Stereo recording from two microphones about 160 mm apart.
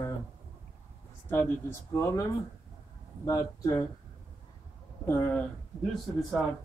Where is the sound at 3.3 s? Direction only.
20° left (ahead or behind).